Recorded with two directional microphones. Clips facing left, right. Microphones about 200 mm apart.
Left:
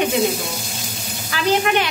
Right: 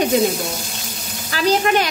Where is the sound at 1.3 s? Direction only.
40° right (ahead or behind).